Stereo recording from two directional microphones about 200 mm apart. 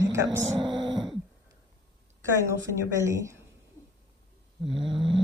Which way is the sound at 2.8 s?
15° right (ahead or behind).